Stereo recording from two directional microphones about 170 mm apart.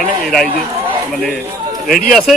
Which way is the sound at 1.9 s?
55° left (ahead or behind).